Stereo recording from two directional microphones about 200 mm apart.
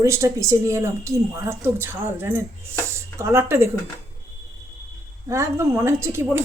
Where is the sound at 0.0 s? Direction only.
15° right (ahead or behind).